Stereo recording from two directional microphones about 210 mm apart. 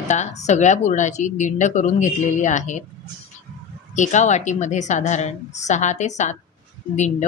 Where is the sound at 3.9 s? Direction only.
35° left (ahead or behind).